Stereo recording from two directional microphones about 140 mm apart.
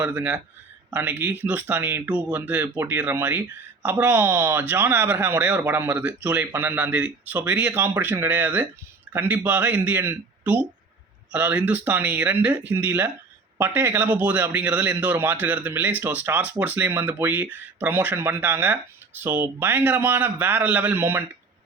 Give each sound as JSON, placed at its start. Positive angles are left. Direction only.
{"t": 0.0, "sound": "a man's voice", "side_deg": -10}
{"t": 6.3, "sound": "a man's voice", "side_deg": -20}